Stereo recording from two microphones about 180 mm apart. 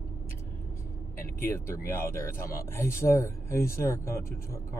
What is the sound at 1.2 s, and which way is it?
Speech, 15° left (ahead or behind).